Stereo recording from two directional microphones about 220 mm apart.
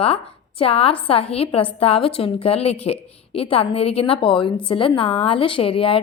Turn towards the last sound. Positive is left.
turn(degrees=25)  # may be behind; listen again after turning